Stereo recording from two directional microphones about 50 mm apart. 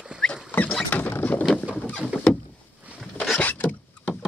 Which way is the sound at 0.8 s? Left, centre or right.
Left.